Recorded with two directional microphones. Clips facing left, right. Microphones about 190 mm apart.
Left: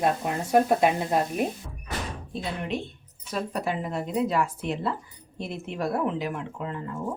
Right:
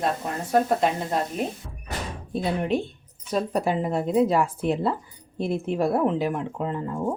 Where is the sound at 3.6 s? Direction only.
40° right (ahead or behind).